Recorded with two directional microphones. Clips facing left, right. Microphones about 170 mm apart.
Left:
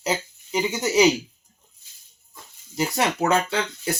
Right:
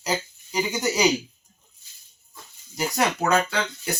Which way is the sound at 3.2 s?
25° left (ahead or behind).